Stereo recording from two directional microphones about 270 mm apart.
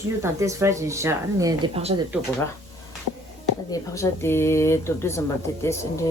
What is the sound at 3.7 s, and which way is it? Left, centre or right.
Speech, centre.